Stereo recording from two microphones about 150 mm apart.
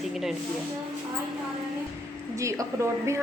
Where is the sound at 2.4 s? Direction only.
20° right (ahead or behind).